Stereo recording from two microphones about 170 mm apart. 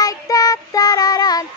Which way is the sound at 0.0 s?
20° left (ahead or behind).